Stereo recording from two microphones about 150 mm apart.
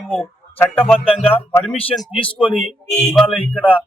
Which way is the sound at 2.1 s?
35° left (ahead or behind).